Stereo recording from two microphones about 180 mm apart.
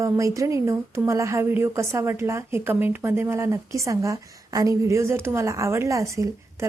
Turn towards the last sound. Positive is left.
turn(degrees=-15)  # may be behind; listen again after turning